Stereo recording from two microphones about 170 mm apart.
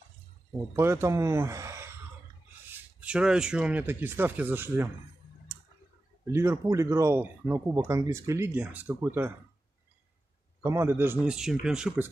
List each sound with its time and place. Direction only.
0.7 s speech: 15° right (ahead or behind)
6.3 s speech: 15° right (ahead or behind)
10.6 s speech: 15° right (ahead or behind)